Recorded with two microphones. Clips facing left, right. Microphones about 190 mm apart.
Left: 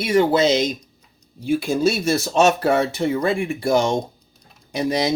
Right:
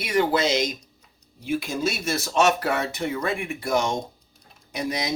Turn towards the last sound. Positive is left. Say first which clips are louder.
# left 7 dB
turn(degrees=30)  # may be behind; listen again after turning